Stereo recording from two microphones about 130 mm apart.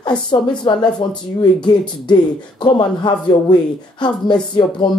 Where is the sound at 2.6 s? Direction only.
35° left (ahead or behind).